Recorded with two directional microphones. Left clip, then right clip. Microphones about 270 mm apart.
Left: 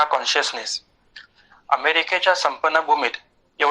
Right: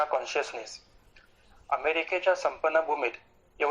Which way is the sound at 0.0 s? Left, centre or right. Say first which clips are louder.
Left 9 dB; left.